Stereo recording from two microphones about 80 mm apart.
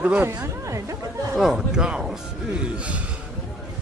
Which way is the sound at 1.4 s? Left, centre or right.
Centre.